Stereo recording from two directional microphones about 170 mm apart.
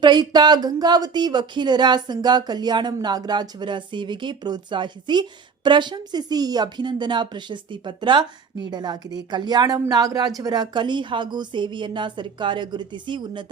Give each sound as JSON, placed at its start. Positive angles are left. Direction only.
{"t": 0.0, "sound": "speech", "side_deg": -25}